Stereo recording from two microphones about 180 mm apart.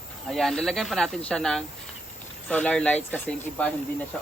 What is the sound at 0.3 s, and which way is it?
Speech, 5° left (ahead or behind).